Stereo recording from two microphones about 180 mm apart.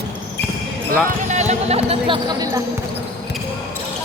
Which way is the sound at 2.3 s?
20° right (ahead or behind).